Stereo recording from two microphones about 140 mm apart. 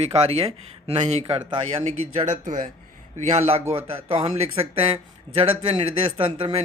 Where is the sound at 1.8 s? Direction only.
60° right (ahead or behind); by 6.6 s 40° right (ahead or behind).